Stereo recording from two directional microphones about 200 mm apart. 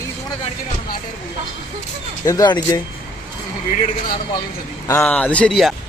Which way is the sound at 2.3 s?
20° left (ahead or behind).